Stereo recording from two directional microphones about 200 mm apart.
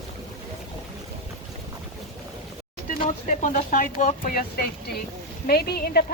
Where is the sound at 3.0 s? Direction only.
40° left (ahead or behind).